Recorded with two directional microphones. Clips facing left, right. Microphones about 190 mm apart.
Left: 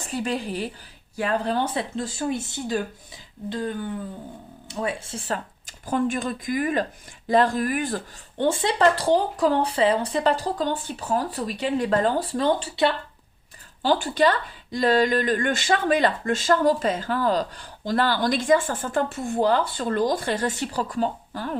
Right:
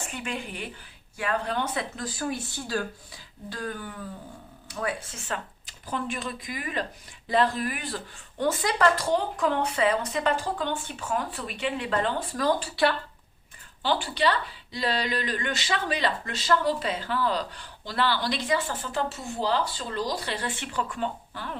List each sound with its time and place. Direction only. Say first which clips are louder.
0.0 s speech: left 7 dB; 35° left (ahead or behind)
8.4 s speech: left 3 dB; 30° left (ahead or behind)
13.8 s speech: left 5 dB; 45° left (ahead or behind)